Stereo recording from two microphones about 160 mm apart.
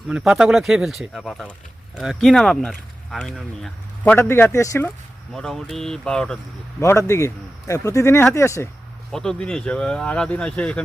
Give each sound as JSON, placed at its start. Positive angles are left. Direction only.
{"t": 0.1, "sound": "speech", "side_deg": -5}
{"t": 5.3, "sound": "speech", "side_deg": 0}
{"t": 6.7, "sound": "speech", "side_deg": 15}
{"t": 9.1, "sound": "speech", "side_deg": 5}